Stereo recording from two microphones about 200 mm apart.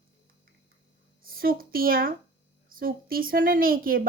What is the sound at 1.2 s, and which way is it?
Speech, 45° right (ahead or behind).